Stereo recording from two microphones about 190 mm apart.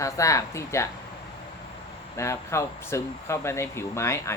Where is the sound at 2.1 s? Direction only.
15° left (ahead or behind).